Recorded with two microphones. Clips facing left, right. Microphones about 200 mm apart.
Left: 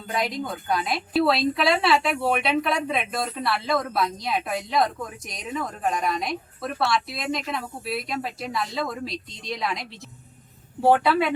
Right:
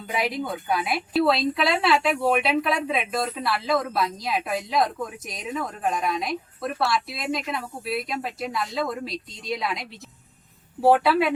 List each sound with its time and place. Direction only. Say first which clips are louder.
0.1 s a woman's voice: right 1 dB; 5° right (ahead or behind)